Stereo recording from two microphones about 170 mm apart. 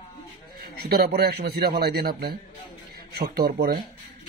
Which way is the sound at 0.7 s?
65° right (ahead or behind).